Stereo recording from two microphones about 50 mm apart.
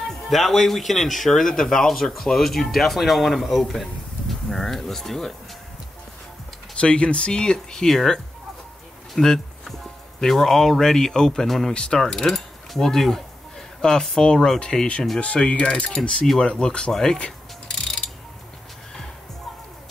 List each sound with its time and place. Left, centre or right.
0.3 s speech: centre
6.7 s speech: left
9.1 s a sound: centre
10.2 s speech: centre
11.7 s speech: centre
16.9 s speech: centre